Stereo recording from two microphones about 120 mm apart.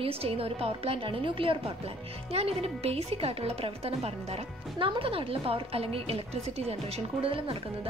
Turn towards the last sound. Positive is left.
turn(degrees=-50)  # may be behind; listen again after turning